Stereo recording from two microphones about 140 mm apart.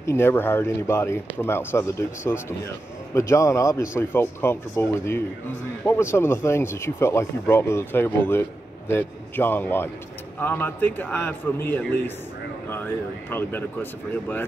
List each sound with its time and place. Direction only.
0.0 s a man's voice: 15° left (ahead or behind)